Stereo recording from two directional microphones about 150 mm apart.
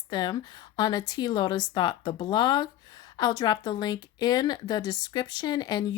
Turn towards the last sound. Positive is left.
turn(degrees=25)  # may be behind; listen again after turning